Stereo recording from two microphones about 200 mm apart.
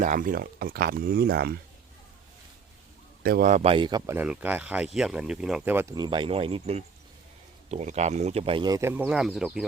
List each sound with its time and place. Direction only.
0.0 s speech: 40° right (ahead or behind)
3.2 s speech: 45° right (ahead or behind); by 9.6 s centre (ahead or behind)